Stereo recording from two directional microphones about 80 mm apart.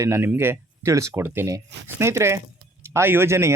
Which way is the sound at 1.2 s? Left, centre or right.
Right.